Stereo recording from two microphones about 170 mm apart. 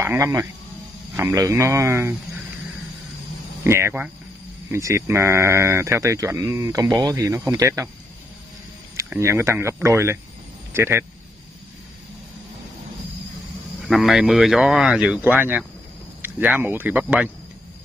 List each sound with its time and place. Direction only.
0.0 s speech: 15° right (ahead or behind)
3.6 s speech: 15° right (ahead or behind)
8.9 s a man's voice: 15° right (ahead or behind)
13.8 s speech: centre (ahead or behind)